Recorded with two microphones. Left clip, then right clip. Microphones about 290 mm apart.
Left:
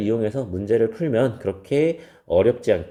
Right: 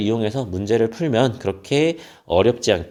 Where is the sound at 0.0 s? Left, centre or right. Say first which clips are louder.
Right 1 dB; centre.